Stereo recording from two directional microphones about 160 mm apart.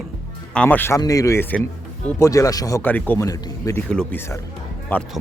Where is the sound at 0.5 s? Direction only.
10° left (ahead or behind).